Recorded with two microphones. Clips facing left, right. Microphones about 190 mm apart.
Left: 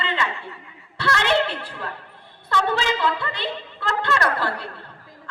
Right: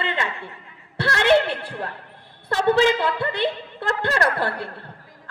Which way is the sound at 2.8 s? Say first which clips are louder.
Right 4 dB; 55° right (ahead or behind).